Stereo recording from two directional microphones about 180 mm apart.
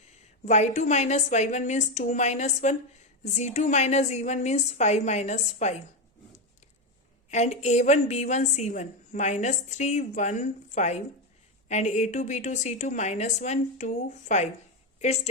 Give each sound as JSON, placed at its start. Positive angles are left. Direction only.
{"t": 0.1, "sound": "a woman's voice", "side_deg": 40}
{"t": 7.3, "sound": "a woman's voice", "side_deg": 40}